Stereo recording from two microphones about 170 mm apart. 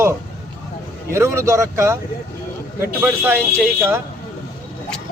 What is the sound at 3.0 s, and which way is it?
Speech, 10° right (ahead or behind).